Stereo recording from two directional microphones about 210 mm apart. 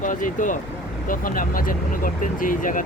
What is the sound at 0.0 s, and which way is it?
Speech, 40° left (ahead or behind).